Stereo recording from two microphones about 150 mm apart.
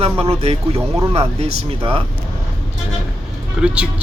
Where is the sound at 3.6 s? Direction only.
5° right (ahead or behind).